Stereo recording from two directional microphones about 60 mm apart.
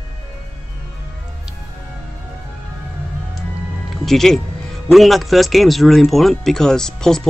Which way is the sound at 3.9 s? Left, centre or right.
Centre.